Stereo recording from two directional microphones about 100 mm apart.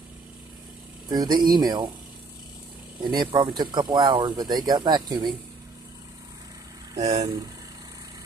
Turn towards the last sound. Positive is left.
turn(degrees=-40)  # may be behind; listen again after turning